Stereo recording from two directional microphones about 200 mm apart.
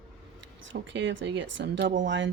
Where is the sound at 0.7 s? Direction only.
60° right (ahead or behind).